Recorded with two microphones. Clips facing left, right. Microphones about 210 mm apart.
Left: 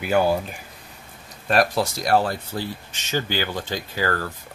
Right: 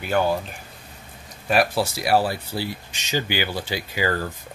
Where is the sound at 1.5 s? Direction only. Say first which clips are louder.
Even; 5° right (ahead or behind).